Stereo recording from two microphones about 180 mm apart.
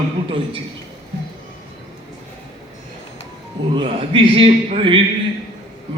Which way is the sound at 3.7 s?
30° right (ahead or behind).